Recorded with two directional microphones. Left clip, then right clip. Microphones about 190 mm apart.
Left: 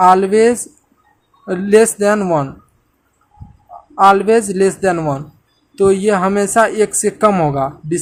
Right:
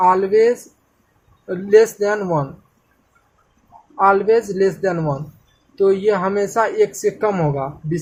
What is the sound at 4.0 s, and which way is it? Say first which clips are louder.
Speech: left 4 dB; 40° left (ahead or behind).